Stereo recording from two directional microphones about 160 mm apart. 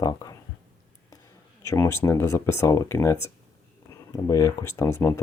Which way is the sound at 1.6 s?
15° left (ahead or behind).